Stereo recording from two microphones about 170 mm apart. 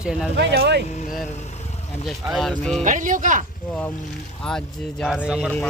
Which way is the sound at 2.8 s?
50° right (ahead or behind).